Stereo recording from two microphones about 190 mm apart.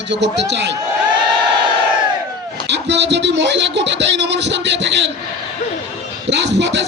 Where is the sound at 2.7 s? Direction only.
65° right (ahead or behind).